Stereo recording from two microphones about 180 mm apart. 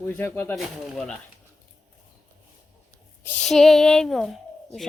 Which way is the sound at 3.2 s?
5° left (ahead or behind).